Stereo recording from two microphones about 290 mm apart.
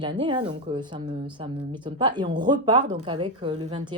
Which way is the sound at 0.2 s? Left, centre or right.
Centre.